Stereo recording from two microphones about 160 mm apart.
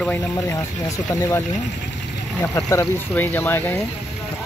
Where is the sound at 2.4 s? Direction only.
20° left (ahead or behind).